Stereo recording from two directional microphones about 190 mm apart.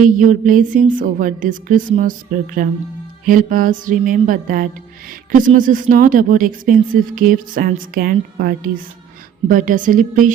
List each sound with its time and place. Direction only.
0.0 s speech: 45° right (ahead or behind)